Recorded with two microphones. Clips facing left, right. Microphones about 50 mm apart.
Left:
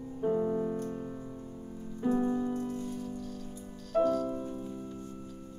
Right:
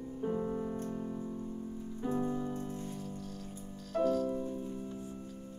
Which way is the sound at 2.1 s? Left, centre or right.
Left.